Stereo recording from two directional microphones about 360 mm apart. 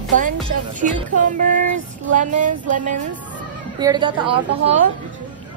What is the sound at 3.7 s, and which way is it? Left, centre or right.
A woman's voice, centre.